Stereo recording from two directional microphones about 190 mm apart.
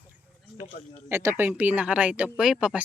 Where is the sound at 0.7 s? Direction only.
30° left (ahead or behind).